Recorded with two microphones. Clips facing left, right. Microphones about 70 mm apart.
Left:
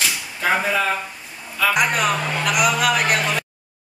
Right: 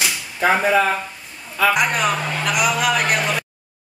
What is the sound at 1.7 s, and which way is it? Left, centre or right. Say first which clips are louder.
Speech: left 1 dB; centre.